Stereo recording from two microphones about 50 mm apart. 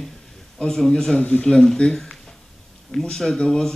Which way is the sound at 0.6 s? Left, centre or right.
Centre.